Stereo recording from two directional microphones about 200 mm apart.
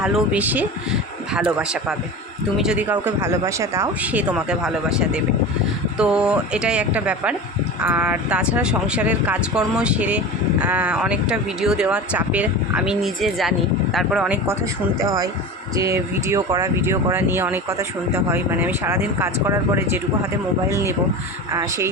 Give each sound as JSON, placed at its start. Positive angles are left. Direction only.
{"t": 0.0, "sound": "speech", "side_deg": -5}
{"t": 14.9, "sound": "speech", "side_deg": -15}